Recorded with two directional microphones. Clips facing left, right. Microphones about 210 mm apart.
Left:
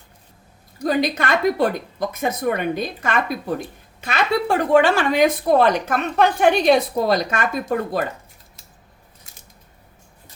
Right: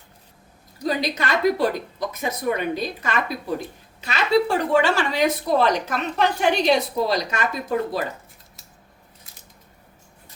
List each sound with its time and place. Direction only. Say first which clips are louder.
0.8 s a woman's voice: left 4 dB; 50° left (ahead or behind)